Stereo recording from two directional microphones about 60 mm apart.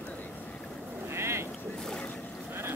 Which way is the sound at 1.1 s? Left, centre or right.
Right.